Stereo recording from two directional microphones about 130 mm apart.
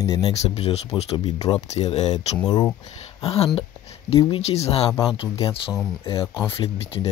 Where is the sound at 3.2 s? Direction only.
50° left (ahead or behind).